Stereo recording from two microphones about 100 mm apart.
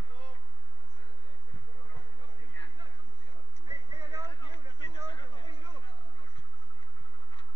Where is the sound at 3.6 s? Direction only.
35° right (ahead or behind).